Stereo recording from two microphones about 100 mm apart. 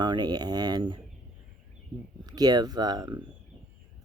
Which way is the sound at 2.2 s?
40° right (ahead or behind).